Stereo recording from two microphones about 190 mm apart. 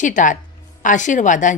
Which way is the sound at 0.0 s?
40° left (ahead or behind).